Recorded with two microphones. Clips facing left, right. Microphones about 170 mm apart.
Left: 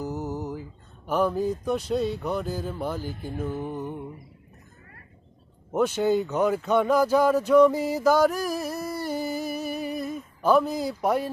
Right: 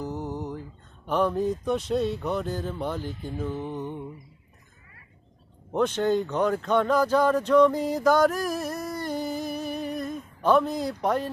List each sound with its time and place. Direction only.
0.0 s mantra: 5° left (ahead or behind)
1.0 s speech: 5° left (ahead or behind)
5.7 s speech: 5° left (ahead or behind)